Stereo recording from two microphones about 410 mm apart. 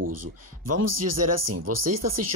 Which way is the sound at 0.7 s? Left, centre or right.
Right.